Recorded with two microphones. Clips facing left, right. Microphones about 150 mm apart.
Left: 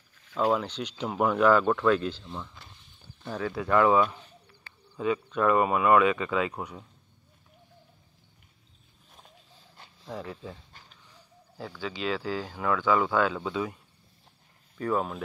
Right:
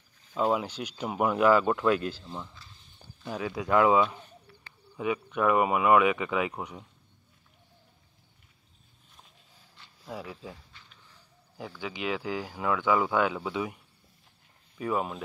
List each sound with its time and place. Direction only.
0.3 s speech: 10° right (ahead or behind)
10.0 s speech: 5° right (ahead or behind)
10.7 s a sound: 45° left (ahead or behind)
11.5 s speech: 15° right (ahead or behind)
14.8 s speech: 10° right (ahead or behind)